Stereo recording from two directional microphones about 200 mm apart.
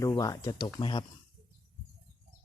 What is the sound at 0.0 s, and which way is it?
Speech, 20° left (ahead or behind).